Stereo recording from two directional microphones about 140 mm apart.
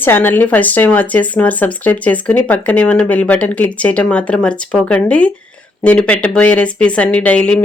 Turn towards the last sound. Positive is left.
turn(degrees=10)  # may be behind; listen again after turning